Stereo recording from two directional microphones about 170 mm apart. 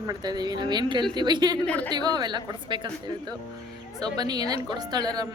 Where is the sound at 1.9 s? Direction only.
25° right (ahead or behind).